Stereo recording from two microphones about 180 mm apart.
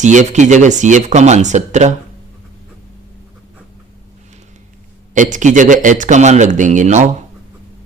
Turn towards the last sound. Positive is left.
turn(degrees=-40)  # may be behind; listen again after turning